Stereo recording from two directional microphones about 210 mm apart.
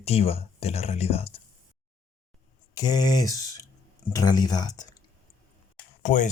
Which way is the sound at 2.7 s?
20° left (ahead or behind).